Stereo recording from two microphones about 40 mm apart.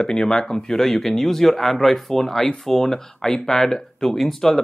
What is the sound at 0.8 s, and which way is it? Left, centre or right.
Speech, centre.